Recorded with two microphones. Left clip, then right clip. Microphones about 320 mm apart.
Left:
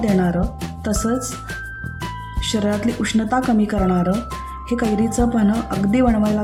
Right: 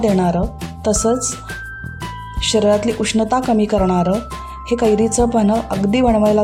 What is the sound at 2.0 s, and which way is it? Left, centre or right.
Music, centre.